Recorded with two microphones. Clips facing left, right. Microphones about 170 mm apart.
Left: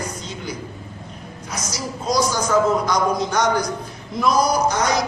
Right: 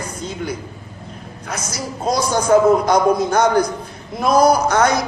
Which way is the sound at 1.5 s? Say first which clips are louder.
Right 2 dB; 55° right (ahead or behind).